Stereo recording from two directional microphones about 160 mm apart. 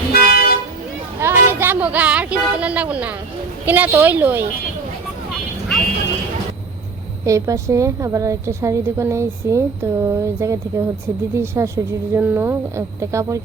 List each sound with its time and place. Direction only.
0.1 s toot: 70° left (ahead or behind)
1.2 s a sound: 15° right (ahead or behind)
3.7 s speech: 10° right (ahead or behind)
7.3 s a woman's voice: 20° right (ahead or behind)